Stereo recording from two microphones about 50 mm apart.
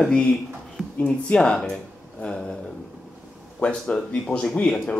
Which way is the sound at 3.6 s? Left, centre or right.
Left.